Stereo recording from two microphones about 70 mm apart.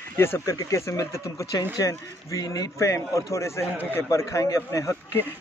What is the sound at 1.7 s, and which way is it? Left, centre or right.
A man's voice, left.